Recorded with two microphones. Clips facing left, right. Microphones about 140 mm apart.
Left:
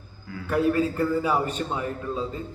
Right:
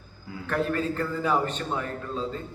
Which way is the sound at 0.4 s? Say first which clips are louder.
Left 4 dB; 10° left (ahead or behind).